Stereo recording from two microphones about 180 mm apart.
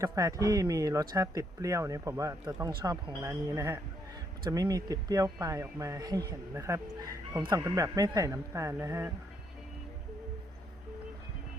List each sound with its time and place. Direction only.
0.0 s speech: 20° right (ahead or behind)